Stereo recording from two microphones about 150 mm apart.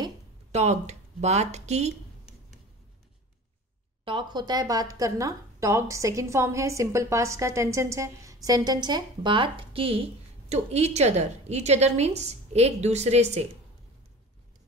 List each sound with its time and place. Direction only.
0.5 s speech: 45° right (ahead or behind)
4.0 s a woman's voice: 35° right (ahead or behind)